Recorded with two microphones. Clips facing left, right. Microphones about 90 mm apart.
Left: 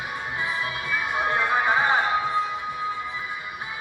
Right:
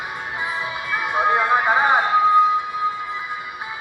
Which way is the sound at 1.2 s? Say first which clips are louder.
Right 6 dB; 20° right (ahead or behind).